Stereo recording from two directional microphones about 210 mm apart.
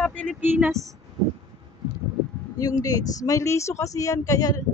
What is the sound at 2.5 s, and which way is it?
A woman's voice, 15° left (ahead or behind).